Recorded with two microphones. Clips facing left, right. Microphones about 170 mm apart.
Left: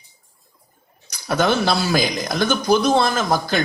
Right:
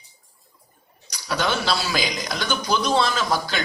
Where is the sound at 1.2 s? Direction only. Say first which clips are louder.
Left 5 dB; 50° left (ahead or behind).